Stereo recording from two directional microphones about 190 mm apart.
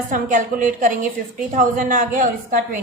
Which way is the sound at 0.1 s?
45° right (ahead or behind).